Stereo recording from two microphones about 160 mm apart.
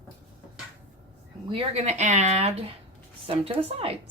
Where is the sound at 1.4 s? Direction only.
35° right (ahead or behind).